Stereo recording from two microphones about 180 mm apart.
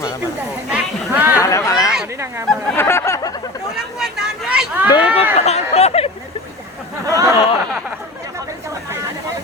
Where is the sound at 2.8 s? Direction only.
15° left (ahead or behind).